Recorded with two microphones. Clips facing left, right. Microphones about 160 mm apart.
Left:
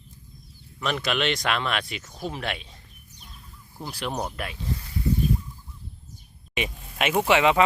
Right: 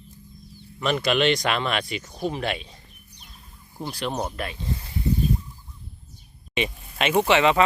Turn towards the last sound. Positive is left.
turn(degrees=10)  # may be behind; listen again after turning